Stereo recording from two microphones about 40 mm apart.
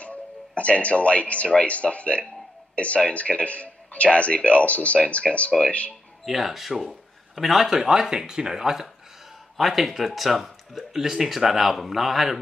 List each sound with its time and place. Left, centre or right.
0.0 s speech: left
6.2 s speech: centre